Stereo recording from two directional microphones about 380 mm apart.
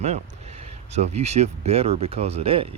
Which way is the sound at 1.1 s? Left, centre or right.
Centre.